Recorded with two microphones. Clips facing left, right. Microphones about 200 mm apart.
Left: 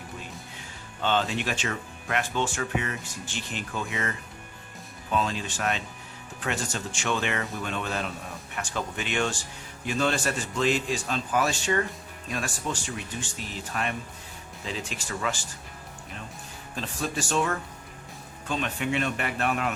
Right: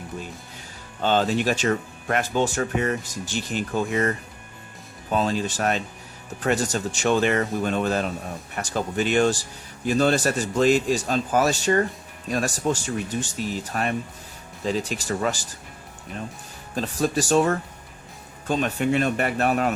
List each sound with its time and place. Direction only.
1.0 s speech: 40° right (ahead or behind)
16.7 s speech: 40° right (ahead or behind)